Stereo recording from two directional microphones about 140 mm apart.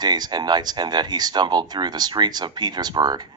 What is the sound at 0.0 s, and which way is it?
Speech, 30° right (ahead or behind).